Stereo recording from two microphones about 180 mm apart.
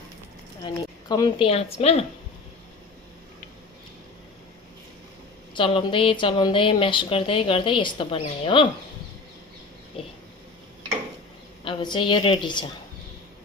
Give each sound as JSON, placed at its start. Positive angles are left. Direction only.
{"t": 0.6, "sound": "a woman's voice", "side_deg": 20}
{"t": 1.5, "sound": "a woman's voice", "side_deg": 35}
{"t": 5.5, "sound": "speech", "side_deg": 25}
{"t": 10.0, "sound": "a sound", "side_deg": 30}
{"t": 11.6, "sound": "speech", "side_deg": 25}